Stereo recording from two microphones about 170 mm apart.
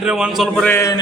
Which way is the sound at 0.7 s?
15° left (ahead or behind).